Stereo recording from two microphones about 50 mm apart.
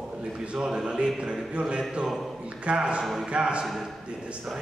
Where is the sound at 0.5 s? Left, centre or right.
Centre.